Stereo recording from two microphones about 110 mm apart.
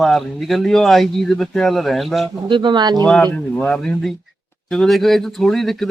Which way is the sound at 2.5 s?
45° right (ahead or behind).